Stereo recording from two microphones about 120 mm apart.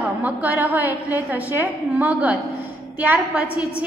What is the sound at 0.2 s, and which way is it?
A woman's voice, 15° right (ahead or behind).